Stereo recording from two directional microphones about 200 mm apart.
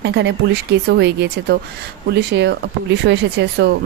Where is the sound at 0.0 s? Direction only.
60° right (ahead or behind).